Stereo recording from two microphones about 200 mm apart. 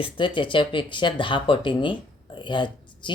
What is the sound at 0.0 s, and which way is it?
Speech, 25° left (ahead or behind).